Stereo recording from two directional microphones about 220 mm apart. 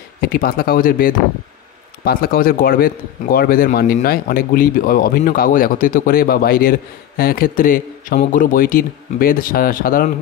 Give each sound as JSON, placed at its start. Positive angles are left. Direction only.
{"t": 0.2, "sound": "speech", "side_deg": 45}